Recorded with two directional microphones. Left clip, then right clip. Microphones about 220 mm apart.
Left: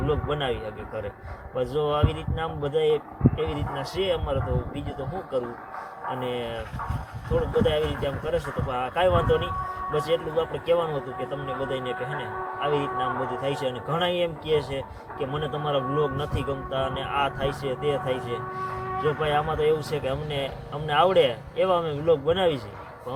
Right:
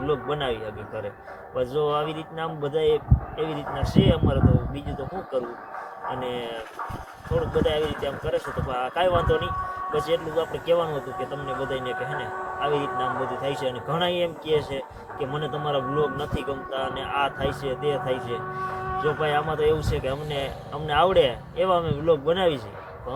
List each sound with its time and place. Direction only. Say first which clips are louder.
0.1 s speech: right 1 dB; centre (ahead or behind)
6.2 s speech: left 2 dB; centre (ahead or behind)
7.6 s speech: even; centre (ahead or behind)
11.2 s speech: right 1 dB; 35° right (ahead or behind)
13.4 s speech: even; centre (ahead or behind)